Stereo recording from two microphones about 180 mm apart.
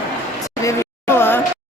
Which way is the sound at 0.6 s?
15° left (ahead or behind).